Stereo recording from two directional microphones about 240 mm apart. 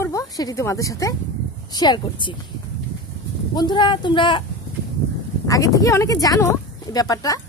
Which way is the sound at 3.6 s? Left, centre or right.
Centre.